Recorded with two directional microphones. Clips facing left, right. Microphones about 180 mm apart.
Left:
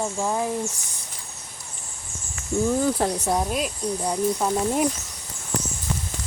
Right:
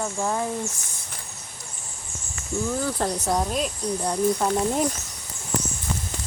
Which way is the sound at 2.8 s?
15° left (ahead or behind).